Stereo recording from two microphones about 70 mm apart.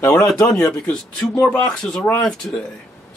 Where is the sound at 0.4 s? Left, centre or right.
Left.